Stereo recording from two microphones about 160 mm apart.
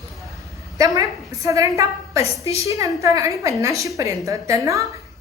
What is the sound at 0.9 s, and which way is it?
A woman's voice, 20° right (ahead or behind).